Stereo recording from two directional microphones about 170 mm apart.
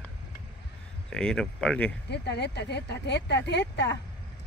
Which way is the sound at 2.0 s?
80° left.